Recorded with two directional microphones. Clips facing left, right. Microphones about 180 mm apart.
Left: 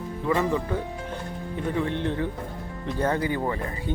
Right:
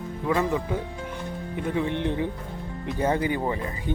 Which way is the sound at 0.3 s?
15° right (ahead or behind).